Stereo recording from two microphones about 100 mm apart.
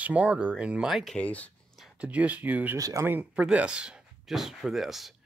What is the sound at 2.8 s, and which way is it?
Speech, 35° right (ahead or behind).